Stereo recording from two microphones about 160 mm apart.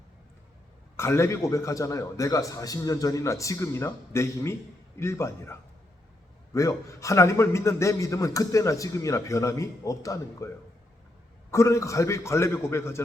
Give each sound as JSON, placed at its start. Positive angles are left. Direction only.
{"t": 0.9, "sound": "a man's voice", "side_deg": 15}
{"t": 11.5, "sound": "a man's voice", "side_deg": 20}